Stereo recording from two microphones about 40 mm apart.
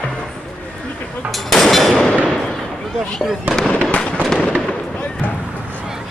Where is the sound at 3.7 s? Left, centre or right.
Left.